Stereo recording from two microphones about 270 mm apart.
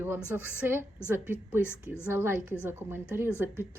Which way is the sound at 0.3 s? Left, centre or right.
Centre.